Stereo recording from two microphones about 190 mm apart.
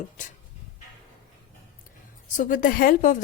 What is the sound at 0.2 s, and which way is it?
Speech, 40° left (ahead or behind).